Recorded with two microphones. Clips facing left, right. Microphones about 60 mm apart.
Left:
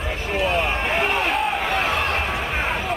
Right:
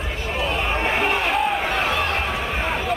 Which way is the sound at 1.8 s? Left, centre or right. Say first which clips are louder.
Even; left.